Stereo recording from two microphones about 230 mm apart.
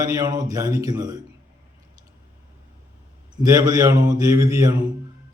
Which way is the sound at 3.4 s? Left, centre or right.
Centre.